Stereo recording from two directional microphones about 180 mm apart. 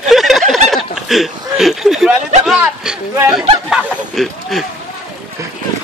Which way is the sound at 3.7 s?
Centre (ahead or behind).